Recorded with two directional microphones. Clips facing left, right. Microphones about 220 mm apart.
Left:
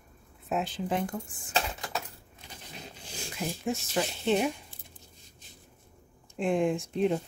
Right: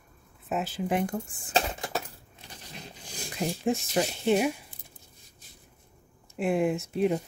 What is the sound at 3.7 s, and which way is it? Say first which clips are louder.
Speech: right 3 dB; 15° right (ahead or behind).